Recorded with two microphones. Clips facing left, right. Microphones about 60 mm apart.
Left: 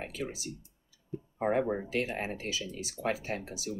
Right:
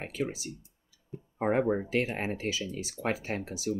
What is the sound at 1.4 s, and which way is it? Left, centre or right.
Speech, right.